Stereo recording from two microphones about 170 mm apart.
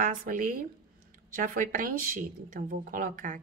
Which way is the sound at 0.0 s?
55° right (ahead or behind).